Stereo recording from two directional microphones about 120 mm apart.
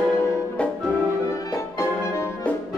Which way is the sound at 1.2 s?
25° left (ahead or behind).